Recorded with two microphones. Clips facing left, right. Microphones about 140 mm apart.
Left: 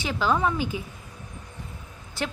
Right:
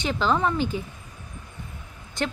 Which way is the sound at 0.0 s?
5° left (ahead or behind).